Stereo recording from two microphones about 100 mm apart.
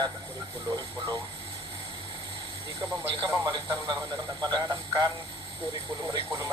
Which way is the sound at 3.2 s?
50° right (ahead or behind).